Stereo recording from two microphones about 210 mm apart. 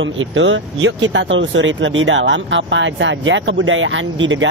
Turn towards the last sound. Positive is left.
turn(degrees=-65)  # may be behind; listen again after turning